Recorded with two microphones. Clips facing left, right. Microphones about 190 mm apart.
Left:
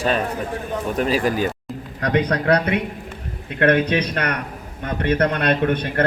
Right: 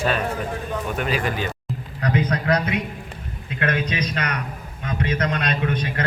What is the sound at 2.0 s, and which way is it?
A man's voice, 65° left (ahead or behind).